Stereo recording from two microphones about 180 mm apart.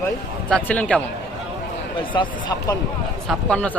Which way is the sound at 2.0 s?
25° left (ahead or behind).